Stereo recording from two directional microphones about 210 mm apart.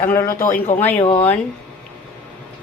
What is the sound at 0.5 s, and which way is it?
Speech, 40° left (ahead or behind).